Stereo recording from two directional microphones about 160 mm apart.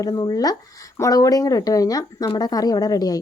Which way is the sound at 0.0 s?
25° left (ahead or behind).